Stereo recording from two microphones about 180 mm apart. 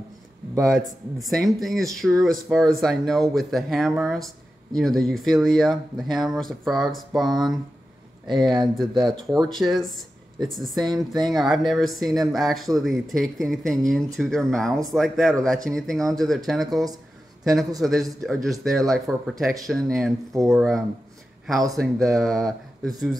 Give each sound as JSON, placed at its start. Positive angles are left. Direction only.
{"t": 1.1, "sound": "speech", "side_deg": 0}
{"t": 8.3, "sound": "speech", "side_deg": -25}
{"t": 9.5, "sound": "speech", "side_deg": 0}
{"t": 10.8, "sound": "speech", "side_deg": -20}
{"t": 11.2, "sound": "speech", "side_deg": 0}